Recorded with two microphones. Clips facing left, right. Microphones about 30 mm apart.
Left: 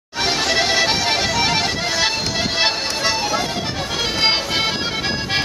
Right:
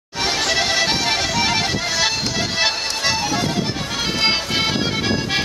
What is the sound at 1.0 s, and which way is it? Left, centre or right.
Music, centre.